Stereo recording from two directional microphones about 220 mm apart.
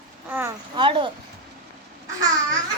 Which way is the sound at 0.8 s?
20° right (ahead or behind).